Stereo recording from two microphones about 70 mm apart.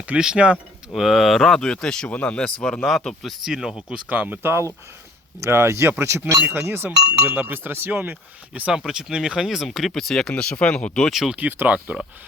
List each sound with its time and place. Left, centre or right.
0.1 s speech: centre
0.9 s speech: centre
3.4 s speech: centre
4.4 s speech: right
8.7 s speech: centre
11.1 s speech: centre
11.3 s speech: right